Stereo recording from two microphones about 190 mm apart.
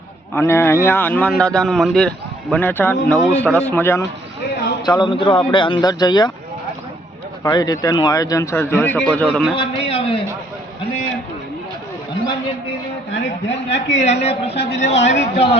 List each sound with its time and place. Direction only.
0.3 s a man's voice: 10° left (ahead or behind)
4.9 s a man's voice: 25° left (ahead or behind)
7.4 s a man's voice: 20° left (ahead or behind); by 9.6 s centre (ahead or behind)
9.6 s a man's voice: 30° left (ahead or behind)
13.1 s a woman's voice: 70° left (ahead or behind)
13.9 s a woman's voice: 35° left (ahead or behind)